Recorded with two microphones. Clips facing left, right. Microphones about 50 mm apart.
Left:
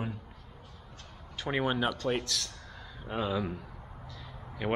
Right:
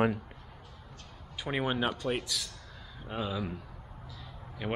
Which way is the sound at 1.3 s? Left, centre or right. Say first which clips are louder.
Left 1 dB; centre.